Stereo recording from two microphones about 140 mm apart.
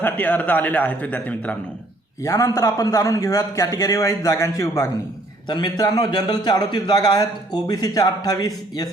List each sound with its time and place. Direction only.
0.0 s a man's voice: 10° left (ahead or behind)
2.2 s a man's voice: 20° left (ahead or behind)